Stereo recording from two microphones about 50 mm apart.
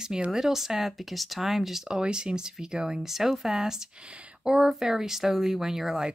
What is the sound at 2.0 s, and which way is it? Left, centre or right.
Speech, centre.